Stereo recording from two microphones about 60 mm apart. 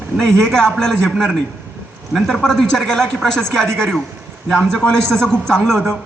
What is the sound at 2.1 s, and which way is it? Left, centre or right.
A man's voice, centre.